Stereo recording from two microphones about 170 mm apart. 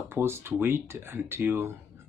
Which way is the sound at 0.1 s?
15° right (ahead or behind).